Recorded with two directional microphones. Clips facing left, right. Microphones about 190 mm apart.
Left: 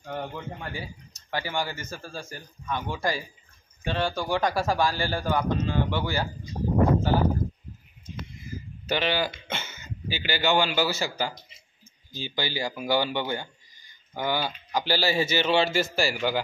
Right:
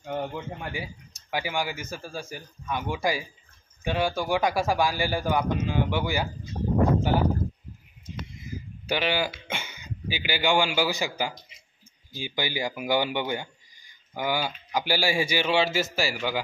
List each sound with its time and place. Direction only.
0.0 s speech: 10° right (ahead or behind)
8.5 s speech: 10° right (ahead or behind)